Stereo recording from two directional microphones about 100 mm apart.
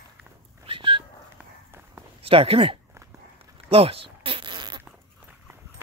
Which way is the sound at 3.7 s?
70° right (ahead or behind).